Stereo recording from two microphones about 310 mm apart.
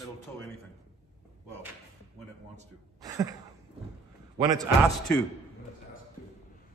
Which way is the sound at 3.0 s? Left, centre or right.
Centre.